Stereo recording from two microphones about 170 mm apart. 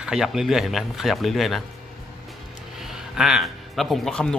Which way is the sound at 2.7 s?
Centre (ahead or behind).